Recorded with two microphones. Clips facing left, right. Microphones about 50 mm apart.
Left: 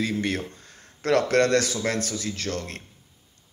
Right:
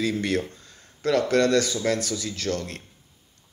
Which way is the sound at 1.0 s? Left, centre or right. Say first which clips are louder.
Even; left.